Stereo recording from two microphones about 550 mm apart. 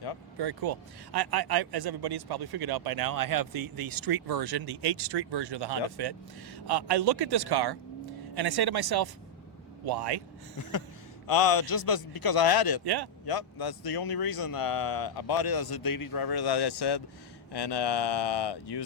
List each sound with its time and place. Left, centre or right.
0.3 s a man's voice: right
10.6 s speech: left
12.8 s a man's voice: right
13.2 s speech: left